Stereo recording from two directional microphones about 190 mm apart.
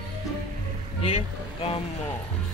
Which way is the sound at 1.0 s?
30° left (ahead or behind).